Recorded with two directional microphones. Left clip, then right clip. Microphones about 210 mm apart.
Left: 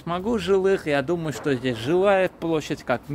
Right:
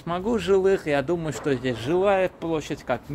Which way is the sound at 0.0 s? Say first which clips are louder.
Even; 10° left (ahead or behind).